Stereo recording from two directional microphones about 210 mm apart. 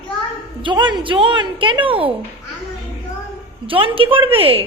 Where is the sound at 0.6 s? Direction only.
20° right (ahead or behind).